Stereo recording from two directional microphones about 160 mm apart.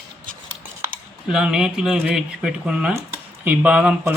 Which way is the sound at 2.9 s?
15° right (ahead or behind).